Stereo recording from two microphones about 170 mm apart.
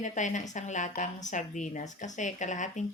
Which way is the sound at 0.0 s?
45° left (ahead or behind).